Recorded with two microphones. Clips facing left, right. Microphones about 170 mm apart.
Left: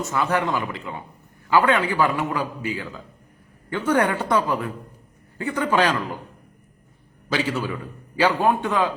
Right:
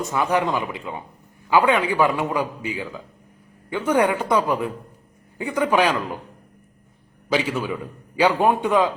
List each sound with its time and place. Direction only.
0.1 s a man's voice: 15° right (ahead or behind)
7.3 s a man's voice: 10° right (ahead or behind)